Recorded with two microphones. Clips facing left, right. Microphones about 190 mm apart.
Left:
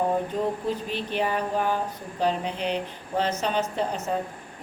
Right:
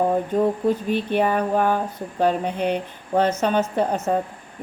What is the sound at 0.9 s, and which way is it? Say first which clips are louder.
A woman's voice: right 7 dB; 55° right (ahead or behind).